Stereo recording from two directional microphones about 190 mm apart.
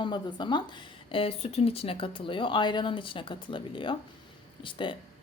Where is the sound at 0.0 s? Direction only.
25° left (ahead or behind).